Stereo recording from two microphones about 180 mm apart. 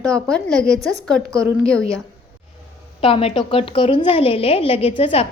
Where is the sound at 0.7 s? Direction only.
20° right (ahead or behind).